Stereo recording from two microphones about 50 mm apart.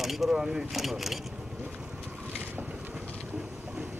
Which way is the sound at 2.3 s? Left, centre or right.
Right.